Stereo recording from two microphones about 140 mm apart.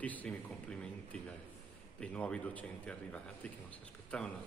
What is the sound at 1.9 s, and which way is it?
A man's voice, 5° left (ahead or behind).